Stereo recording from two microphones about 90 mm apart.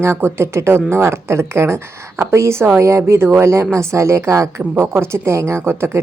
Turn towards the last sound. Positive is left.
turn(degrees=-30)  # may be behind; listen again after turning